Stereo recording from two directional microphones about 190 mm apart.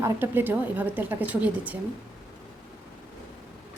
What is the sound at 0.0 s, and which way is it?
A woman's voice, 10° right (ahead or behind).